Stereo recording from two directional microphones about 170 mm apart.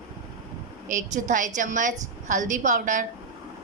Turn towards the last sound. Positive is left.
turn(degrees=-50)  # may be behind; listen again after turning